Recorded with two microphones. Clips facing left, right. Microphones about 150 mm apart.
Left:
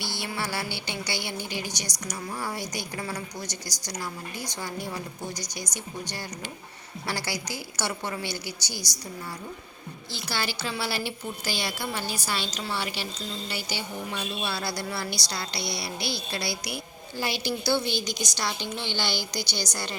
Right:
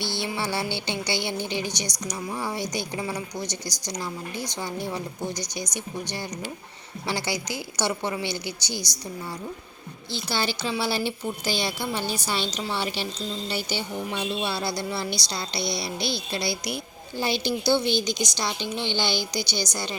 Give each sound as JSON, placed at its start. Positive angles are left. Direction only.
{"t": 0.0, "sound": "a woman's voice", "side_deg": -25}
{"t": 5.7, "sound": "a woman's voice", "side_deg": -15}
{"t": 10.1, "sound": "a woman's voice", "side_deg": -20}